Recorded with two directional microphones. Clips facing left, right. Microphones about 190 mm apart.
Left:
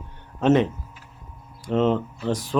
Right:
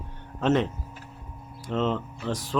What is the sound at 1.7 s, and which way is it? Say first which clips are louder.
Speech: left 6 dB; 10° left (ahead or behind).